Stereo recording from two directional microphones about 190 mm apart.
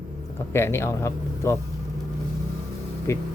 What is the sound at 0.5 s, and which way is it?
Speech, 15° left (ahead or behind).